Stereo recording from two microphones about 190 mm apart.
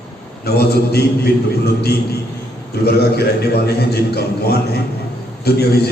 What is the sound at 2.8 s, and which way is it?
A man's voice, 55° left (ahead or behind).